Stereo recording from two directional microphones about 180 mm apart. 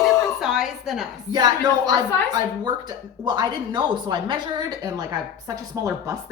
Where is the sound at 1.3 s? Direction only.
20° right (ahead or behind).